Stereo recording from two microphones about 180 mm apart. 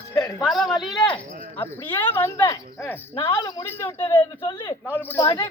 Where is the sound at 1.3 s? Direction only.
45° right (ahead or behind).